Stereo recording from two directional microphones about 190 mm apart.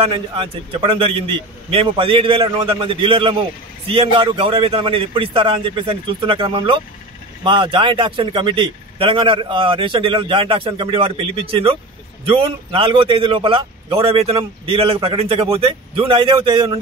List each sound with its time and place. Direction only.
0.0 s a man's voice: 30° right (ahead or behind)